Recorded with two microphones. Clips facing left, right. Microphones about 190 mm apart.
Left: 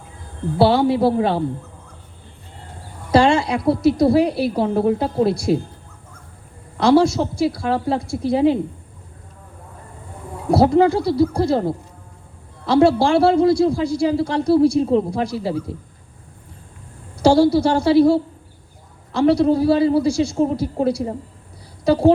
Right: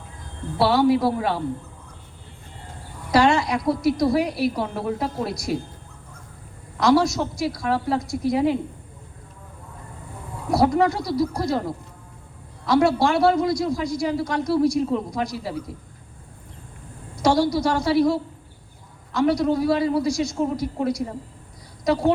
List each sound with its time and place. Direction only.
0.6 s a man's voice: 30° left (ahead or behind)
3.1 s a man's voice: 25° left (ahead or behind)
6.7 s a man's voice: 30° left (ahead or behind)
10.5 s a man's voice: 30° left (ahead or behind)
17.2 s a man's voice: 30° left (ahead or behind)